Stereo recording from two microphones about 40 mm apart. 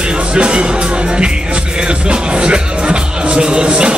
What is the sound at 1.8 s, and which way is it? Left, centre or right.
Music, right.